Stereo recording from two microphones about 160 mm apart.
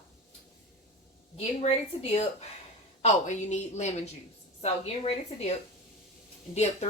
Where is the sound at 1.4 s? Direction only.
40° left (ahead or behind).